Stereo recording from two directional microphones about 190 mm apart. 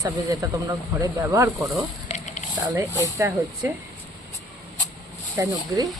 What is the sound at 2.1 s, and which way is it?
Sizzle, 40° left (ahead or behind).